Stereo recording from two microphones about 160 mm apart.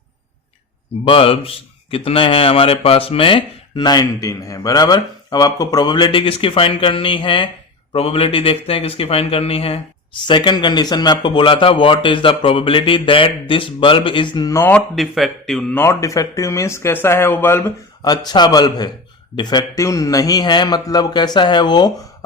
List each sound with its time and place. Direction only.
1.0 s a man's voice: 35° left (ahead or behind); by 14.8 s 15° left (ahead or behind)
14.9 s speech: centre (ahead or behind)
15.8 s speech: 20° left (ahead or behind)
18.0 s speech: 25° left (ahead or behind)